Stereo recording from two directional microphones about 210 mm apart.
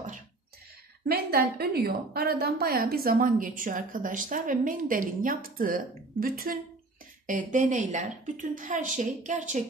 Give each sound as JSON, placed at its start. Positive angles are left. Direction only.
{"t": 1.0, "sound": "a woman's voice", "side_deg": -50}